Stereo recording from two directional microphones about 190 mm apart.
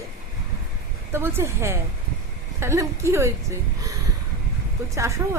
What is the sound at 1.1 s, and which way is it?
A woman's voice, 10° right (ahead or behind).